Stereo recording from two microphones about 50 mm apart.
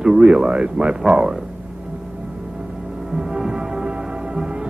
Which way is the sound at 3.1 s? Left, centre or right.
Centre.